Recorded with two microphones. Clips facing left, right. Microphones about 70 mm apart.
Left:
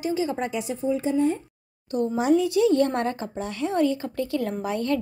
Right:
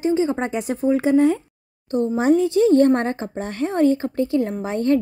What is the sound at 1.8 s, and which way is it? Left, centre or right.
A woman's voice, right.